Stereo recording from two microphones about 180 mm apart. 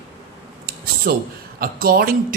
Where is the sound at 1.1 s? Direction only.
55° right (ahead or behind).